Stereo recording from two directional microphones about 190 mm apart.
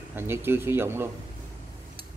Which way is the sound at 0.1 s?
10° right (ahead or behind).